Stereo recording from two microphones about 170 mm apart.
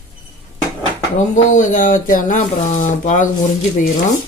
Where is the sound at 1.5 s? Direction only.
50° left (ahead or behind).